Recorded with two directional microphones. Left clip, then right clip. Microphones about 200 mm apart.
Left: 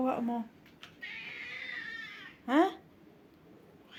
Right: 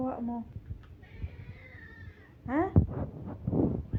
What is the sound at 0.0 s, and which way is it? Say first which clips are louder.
Speech: left 3 dB; 25° left (ahead or behind).